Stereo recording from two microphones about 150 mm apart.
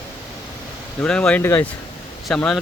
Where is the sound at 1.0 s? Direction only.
5° left (ahead or behind).